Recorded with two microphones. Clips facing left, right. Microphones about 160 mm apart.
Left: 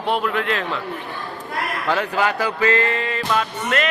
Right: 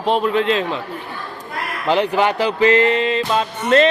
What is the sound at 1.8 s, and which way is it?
Music, 20° right (ahead or behind).